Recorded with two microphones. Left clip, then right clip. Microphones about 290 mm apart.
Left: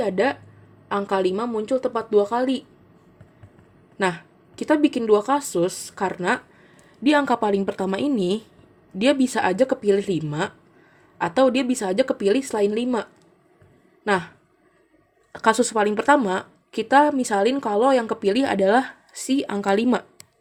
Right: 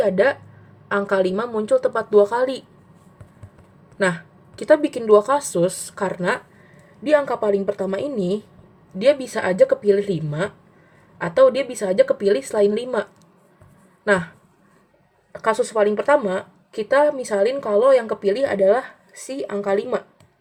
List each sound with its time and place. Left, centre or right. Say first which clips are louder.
0.0 s a woman's voice: right 4 dB; centre
4.7 s a woman's voice: right 4 dB; centre
15.3 s a woman's voice: left 1 dB; left